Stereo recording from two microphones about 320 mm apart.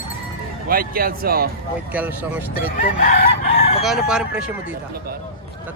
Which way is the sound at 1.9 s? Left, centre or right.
Centre.